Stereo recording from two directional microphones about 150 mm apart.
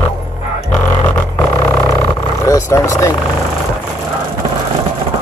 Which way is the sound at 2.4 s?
20° left (ahead or behind).